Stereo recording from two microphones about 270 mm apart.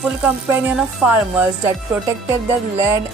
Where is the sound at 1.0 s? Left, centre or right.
Centre.